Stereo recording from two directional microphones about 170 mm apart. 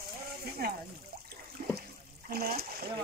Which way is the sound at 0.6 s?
65° right (ahead or behind).